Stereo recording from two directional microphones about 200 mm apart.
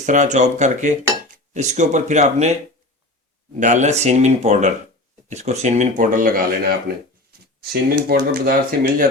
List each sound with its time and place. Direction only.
0.0 s speech: 35° right (ahead or behind)
3.6 s speech: 35° right (ahead or behind)